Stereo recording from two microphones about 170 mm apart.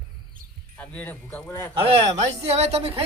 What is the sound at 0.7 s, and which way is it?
Speech, 10° left (ahead or behind).